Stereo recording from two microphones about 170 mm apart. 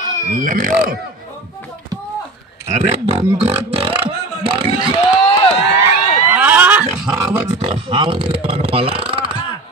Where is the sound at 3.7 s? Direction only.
30° right (ahead or behind).